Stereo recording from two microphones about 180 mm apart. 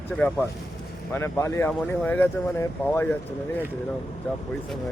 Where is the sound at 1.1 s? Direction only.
15° left (ahead or behind).